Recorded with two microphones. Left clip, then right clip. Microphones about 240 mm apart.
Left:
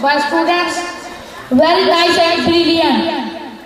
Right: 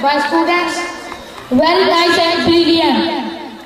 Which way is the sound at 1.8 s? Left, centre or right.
Left.